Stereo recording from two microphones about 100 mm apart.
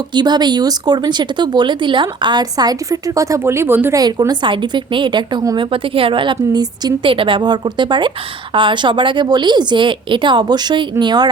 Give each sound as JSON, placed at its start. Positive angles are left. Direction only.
{"t": 0.1, "sound": "speech", "side_deg": -45}
{"t": 3.9, "sound": "speech", "side_deg": -40}
{"t": 5.5, "sound": "a woman's voice", "side_deg": -60}
{"t": 7.1, "sound": "speech", "side_deg": -60}